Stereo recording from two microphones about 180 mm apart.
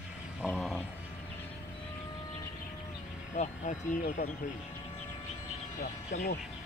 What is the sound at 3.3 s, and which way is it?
Vehicle, 40° left (ahead or behind).